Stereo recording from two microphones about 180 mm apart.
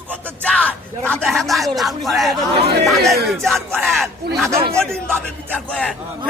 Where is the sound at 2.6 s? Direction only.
60° right (ahead or behind).